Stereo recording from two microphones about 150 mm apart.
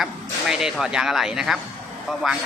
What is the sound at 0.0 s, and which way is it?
Speech, 5° right (ahead or behind).